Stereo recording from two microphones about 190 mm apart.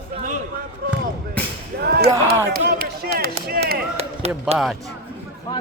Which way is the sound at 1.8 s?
55° right (ahead or behind).